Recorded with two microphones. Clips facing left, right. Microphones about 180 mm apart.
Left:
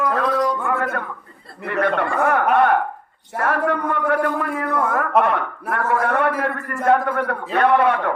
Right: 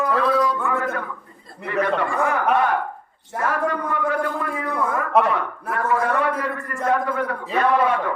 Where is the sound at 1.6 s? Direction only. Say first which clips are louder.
Left 1 dB; 60° left (ahead or behind).